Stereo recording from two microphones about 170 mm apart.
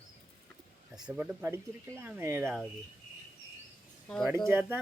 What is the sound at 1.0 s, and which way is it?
Speech, 10° right (ahead or behind).